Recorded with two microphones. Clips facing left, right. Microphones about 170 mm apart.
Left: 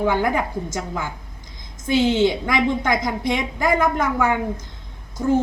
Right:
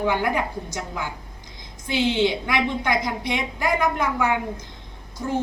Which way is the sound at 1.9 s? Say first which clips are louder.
Left 4 dB; 45° left (ahead or behind).